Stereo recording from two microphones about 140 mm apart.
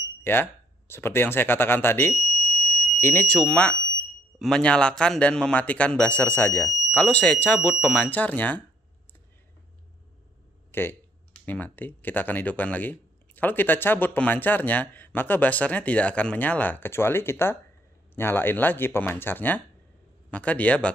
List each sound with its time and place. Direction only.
0.2 s speech: 15° left (ahead or behind)
2.5 s smoke detector: 15° left (ahead or behind)
4.4 s speech: 5° left (ahead or behind)
10.7 s speech: 15° left (ahead or behind)